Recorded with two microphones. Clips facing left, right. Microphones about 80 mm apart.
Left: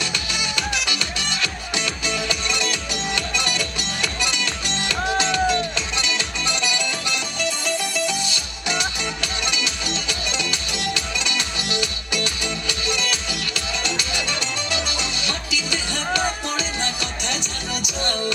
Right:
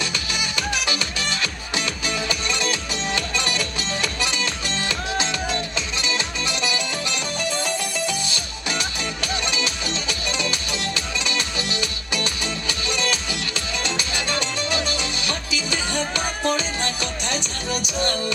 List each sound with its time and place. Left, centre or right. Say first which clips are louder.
0.0 s music: even; right
14.8 s music: right 1 dB; left
15.3 s music: even; right